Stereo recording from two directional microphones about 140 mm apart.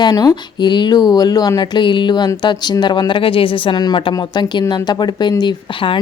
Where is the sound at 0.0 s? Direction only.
30° left (ahead or behind).